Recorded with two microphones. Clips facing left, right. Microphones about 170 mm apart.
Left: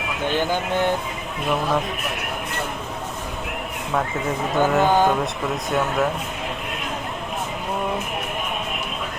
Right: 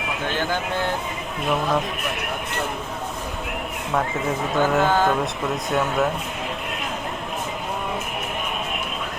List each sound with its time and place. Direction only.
1.5 s a man's voice: centre (ahead or behind)
3.9 s speech: centre (ahead or behind)
4.9 s speech: 15° left (ahead or behind)
5.1 s speech: centre (ahead or behind)